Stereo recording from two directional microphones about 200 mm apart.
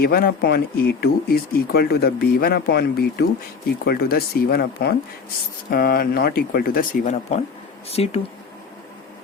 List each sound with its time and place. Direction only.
0.0 s speech: 50° left (ahead or behind); by 8.2 s 30° left (ahead or behind)